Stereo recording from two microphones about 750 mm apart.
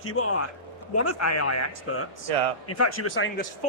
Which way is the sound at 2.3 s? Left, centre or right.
Right.